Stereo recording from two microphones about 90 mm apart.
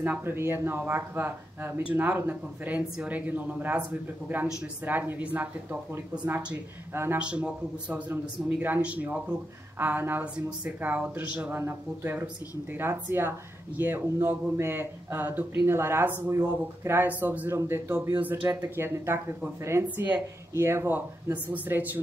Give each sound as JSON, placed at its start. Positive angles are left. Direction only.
{"t": 0.2, "sound": "speech", "side_deg": -25}
{"t": 7.2, "sound": "speech", "side_deg": -10}
{"t": 11.5, "sound": "speech", "side_deg": -25}